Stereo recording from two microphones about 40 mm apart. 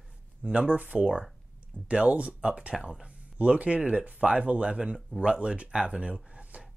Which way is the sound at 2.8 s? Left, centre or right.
Right.